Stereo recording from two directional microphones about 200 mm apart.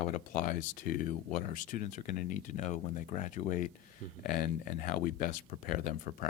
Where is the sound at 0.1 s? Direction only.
45° left (ahead or behind).